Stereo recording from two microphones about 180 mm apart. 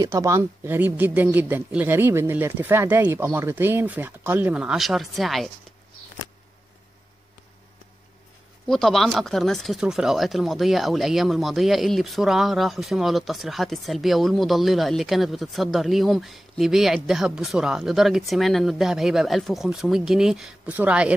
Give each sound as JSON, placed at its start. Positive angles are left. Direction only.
{"t": 0.0, "sound": "speech", "side_deg": -20}
{"t": 8.6, "sound": "speech", "side_deg": 0}